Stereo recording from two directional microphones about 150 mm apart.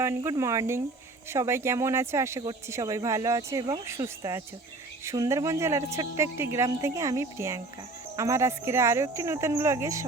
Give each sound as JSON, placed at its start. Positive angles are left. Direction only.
{"t": 0.0, "sound": "speech", "side_deg": -20}